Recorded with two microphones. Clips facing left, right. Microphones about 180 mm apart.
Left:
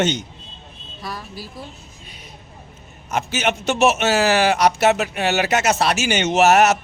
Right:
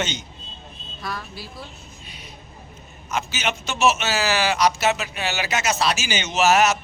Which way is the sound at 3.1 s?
55° left (ahead or behind).